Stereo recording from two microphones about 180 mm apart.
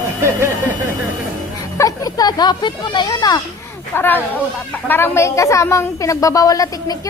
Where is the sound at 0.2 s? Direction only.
15° right (ahead or behind).